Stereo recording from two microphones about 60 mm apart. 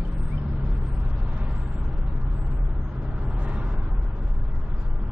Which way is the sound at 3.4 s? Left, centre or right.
Right.